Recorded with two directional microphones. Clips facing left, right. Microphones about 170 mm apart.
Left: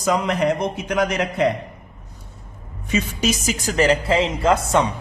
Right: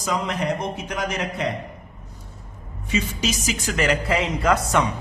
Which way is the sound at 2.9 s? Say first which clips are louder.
Left 3 dB; 50° left (ahead or behind).